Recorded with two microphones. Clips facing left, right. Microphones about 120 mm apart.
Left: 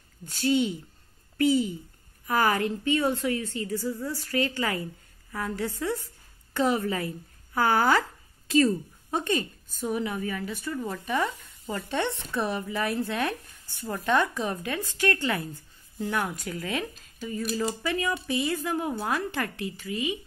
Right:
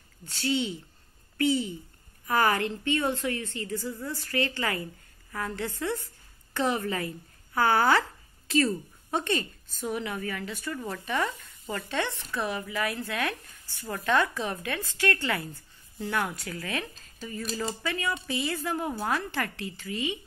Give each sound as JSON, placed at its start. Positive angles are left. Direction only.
{"t": 0.3, "sound": "a woman's voice", "side_deg": 15}
{"t": 11.7, "sound": "speech", "side_deg": 20}